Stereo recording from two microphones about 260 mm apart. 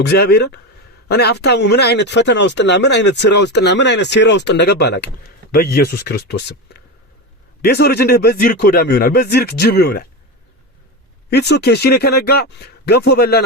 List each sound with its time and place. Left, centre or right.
0.0 s speech: left
11.3 s speech: left